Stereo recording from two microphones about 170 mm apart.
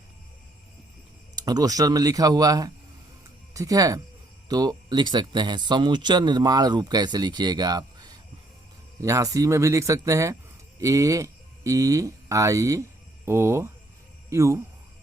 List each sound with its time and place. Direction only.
1.5 s speech: 20° right (ahead or behind)